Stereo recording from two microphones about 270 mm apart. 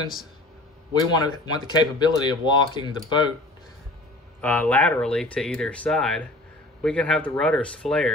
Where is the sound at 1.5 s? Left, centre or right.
Centre.